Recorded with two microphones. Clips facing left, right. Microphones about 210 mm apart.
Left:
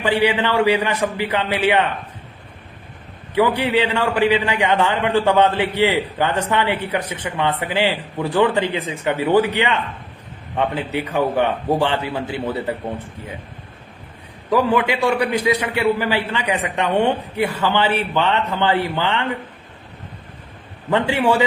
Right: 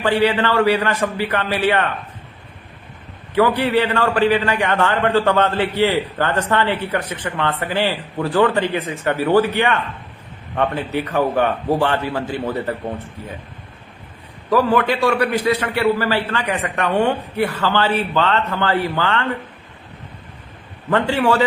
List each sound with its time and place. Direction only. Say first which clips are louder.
0.0 s a man's voice: right 1 dB; 15° left (ahead or behind)
3.3 s a man's voice: right 1 dB; 15° left (ahead or behind)
14.5 s a man's voice: right 1 dB; 15° left (ahead or behind)
20.9 s a man's voice: even; 15° left (ahead or behind)